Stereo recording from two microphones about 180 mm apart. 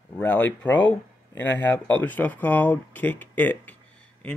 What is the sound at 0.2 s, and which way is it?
Speech, 10° left (ahead or behind).